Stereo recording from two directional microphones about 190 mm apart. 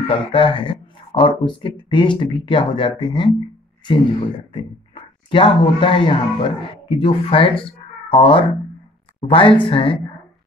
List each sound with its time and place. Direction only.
0.1 s speech: 30° left (ahead or behind)
4.5 s speech: 25° left (ahead or behind)